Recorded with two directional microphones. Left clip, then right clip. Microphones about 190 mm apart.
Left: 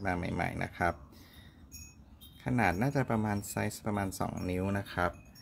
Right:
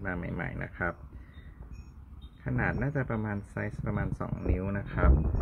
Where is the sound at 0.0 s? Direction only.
10° left (ahead or behind).